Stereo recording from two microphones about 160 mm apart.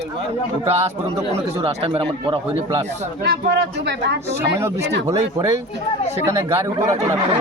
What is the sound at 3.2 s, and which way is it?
Speech, 85° right.